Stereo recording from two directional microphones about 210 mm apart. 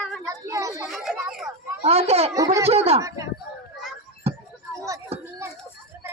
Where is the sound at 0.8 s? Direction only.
Centre (ahead or behind).